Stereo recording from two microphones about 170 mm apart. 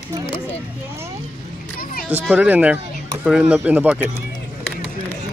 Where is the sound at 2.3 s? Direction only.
10° right (ahead or behind).